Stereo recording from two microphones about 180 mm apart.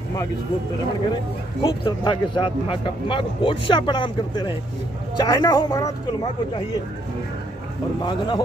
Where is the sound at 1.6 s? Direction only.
25° left (ahead or behind).